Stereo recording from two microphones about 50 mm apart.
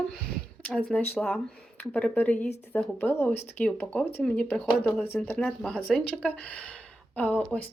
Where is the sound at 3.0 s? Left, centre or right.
Left.